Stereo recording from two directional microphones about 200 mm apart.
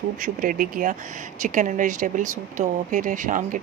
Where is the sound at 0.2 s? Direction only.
45° right (ahead or behind).